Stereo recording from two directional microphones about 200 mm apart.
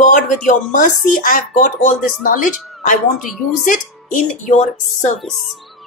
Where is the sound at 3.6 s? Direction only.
40° left (ahead or behind).